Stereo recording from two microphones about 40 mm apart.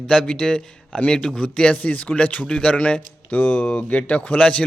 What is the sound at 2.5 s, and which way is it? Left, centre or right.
Speech, left.